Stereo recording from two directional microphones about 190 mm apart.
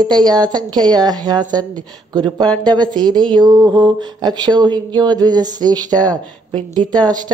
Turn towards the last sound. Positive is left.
turn(degrees=-20)  # may be behind; listen again after turning